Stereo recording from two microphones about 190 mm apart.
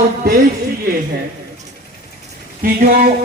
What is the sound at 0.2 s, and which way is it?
Speech, 55° right (ahead or behind).